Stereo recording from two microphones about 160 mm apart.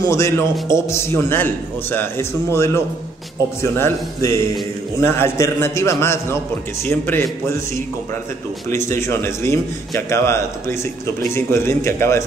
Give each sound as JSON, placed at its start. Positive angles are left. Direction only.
{"t": 0.0, "sound": "a man's voice", "side_deg": 15}
{"t": 8.6, "sound": "a man's voice", "side_deg": 15}